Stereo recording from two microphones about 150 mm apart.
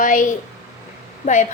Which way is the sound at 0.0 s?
60° left (ahead or behind).